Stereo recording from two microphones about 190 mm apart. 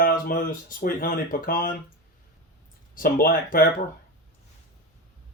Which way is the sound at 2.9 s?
50° left (ahead or behind).